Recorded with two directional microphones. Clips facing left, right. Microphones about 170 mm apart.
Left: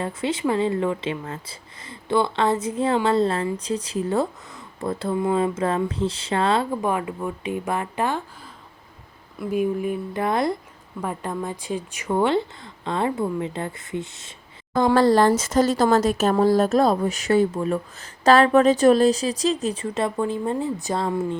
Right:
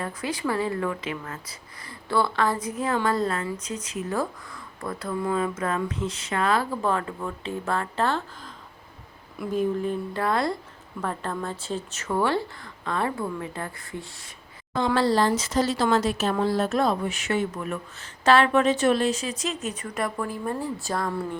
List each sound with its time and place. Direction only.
0.0 s speech: 25° left (ahead or behind)
9.5 s speech: 10° left (ahead or behind)
14.9 s speech: 50° left (ahead or behind); by 21.3 s 20° left (ahead or behind)